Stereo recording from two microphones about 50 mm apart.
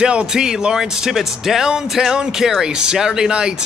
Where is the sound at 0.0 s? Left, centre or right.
Right.